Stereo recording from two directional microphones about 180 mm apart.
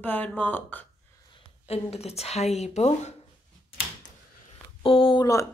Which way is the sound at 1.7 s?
35° left (ahead or behind).